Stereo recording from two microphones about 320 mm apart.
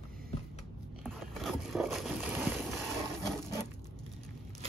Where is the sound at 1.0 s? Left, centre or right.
Centre.